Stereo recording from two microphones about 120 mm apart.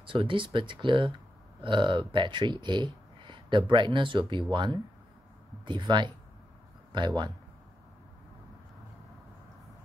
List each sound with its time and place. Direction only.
0.0 s speech: 45° right (ahead or behind)